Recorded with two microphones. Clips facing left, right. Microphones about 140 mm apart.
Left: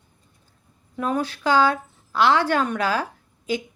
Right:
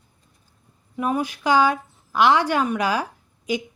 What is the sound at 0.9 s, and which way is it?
A woman's voice, 10° right (ahead or behind).